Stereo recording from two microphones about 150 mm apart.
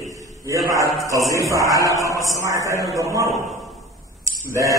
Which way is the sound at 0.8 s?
20° left (ahead or behind).